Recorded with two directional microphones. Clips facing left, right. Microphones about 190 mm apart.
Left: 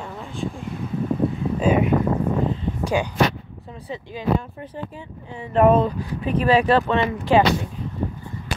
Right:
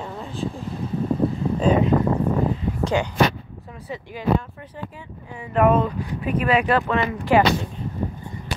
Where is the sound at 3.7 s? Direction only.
25° left (ahead or behind).